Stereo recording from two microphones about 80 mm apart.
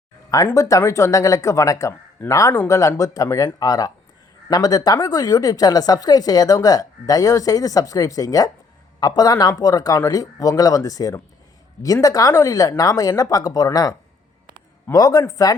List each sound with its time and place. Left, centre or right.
0.5 s a woman's voice: left
14.9 s a woman's voice: left